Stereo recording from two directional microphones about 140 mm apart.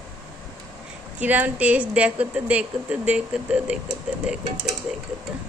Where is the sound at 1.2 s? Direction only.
10° right (ahead or behind).